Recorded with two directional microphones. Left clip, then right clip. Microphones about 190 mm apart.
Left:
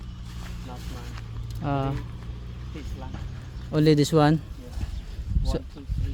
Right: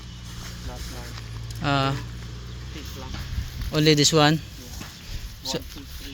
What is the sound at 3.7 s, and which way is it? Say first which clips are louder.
Speech: right 2 dB; 25° left (ahead or behind).